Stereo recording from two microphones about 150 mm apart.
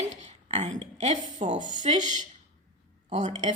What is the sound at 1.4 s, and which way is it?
A woman's voice, 55° right (ahead or behind).